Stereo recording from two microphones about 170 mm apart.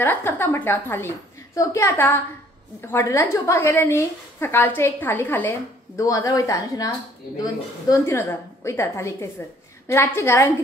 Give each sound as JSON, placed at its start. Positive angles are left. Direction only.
{"t": 0.0, "sound": "a woman's voice", "side_deg": 15}
{"t": 7.9, "sound": "a woman's voice", "side_deg": 15}